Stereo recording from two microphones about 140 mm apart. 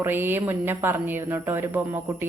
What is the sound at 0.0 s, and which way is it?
A woman's voice, 15° right (ahead or behind).